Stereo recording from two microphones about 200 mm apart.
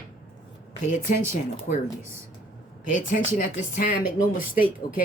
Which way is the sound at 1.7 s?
45° left (ahead or behind).